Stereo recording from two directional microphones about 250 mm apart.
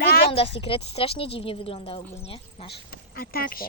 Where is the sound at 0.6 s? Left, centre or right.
Left.